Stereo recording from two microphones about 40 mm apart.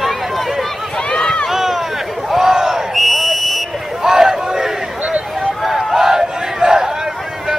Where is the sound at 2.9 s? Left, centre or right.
Centre.